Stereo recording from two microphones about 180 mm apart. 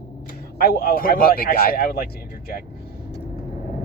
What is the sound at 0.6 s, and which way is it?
Speech, 55° left (ahead or behind).